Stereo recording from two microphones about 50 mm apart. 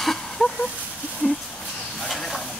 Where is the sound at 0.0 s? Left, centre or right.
Centre.